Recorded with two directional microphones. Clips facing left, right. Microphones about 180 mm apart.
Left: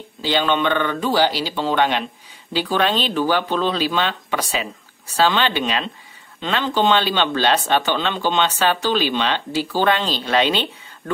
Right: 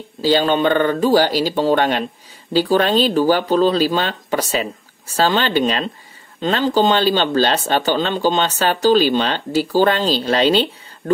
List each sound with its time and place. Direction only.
0.2 s speech: 40° right (ahead or behind)